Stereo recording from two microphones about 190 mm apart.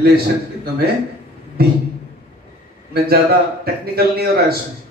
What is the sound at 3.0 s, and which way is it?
A man's voice, 55° right (ahead or behind).